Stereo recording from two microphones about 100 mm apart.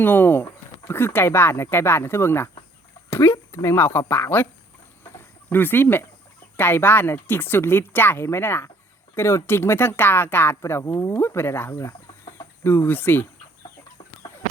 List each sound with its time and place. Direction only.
0.0 s speech: 20° left (ahead or behind)
3.1 s a sound: 20° left (ahead or behind)
3.5 s speech: 30° left (ahead or behind)
5.1 s chicken: 20° left (ahead or behind)
6.6 s speech: 20° left (ahead or behind)